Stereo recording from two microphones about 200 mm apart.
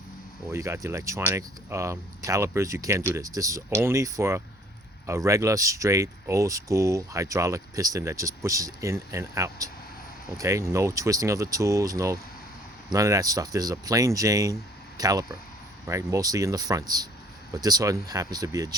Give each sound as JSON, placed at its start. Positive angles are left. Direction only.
{"t": 0.5, "sound": "speech", "side_deg": -15}